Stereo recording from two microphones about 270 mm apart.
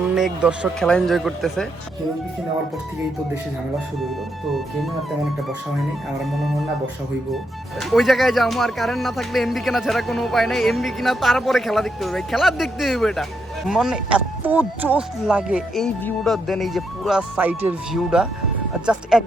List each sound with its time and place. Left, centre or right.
0.1 s speech: centre
7.8 s speech: centre